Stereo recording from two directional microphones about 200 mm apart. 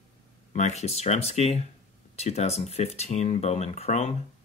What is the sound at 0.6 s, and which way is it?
Speech, 35° left (ahead or behind).